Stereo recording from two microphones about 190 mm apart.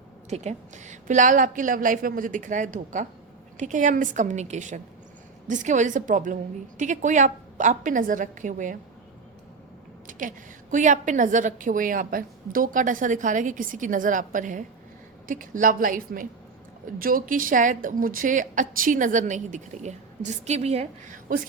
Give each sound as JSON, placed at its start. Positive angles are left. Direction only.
{"t": 0.3, "sound": "a woman's voice", "side_deg": -35}
{"t": 10.1, "sound": "a woman's voice", "side_deg": -45}